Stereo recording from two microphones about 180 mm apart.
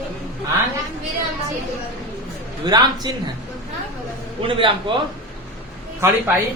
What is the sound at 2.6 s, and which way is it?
Speech, 25° right (ahead or behind).